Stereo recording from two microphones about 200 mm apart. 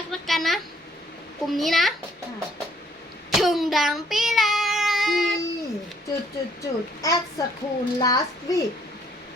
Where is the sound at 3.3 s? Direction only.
Centre (ahead or behind).